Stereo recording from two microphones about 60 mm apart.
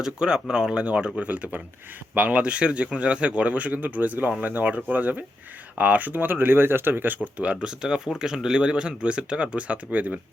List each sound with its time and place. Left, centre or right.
0.0 s speech: centre; by 7.2 s right
7.3 s speech: centre